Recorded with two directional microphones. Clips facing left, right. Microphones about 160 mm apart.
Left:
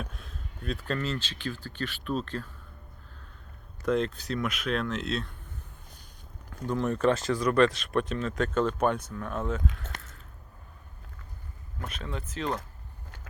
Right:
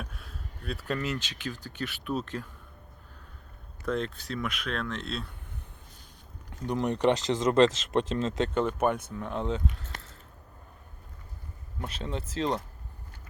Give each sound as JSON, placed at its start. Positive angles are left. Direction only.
{"t": 0.0, "sound": "speech", "side_deg": -5}
{"t": 3.8, "sound": "speech", "side_deg": 0}
{"t": 6.5, "sound": "speech", "side_deg": -20}
{"t": 11.8, "sound": "speech", "side_deg": -30}